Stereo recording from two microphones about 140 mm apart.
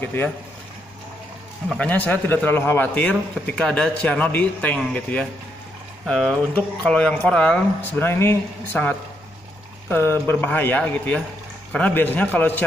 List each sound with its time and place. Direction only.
0.0 s a man's voice: 15° left (ahead or behind)
1.8 s a man's voice: 10° left (ahead or behind)